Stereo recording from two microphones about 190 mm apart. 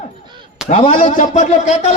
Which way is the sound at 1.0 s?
45° left (ahead or behind).